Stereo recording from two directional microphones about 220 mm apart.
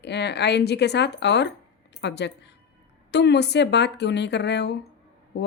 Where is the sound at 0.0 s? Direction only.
50° left (ahead or behind).